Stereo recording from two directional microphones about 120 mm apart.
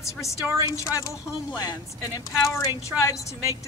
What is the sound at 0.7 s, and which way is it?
Speech, 25° left (ahead or behind).